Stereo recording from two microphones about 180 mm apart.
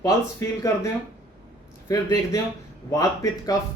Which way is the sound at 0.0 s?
15° left (ahead or behind).